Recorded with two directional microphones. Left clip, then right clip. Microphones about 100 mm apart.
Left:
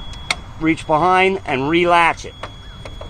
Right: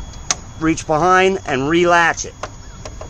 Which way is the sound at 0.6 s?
50° right (ahead or behind).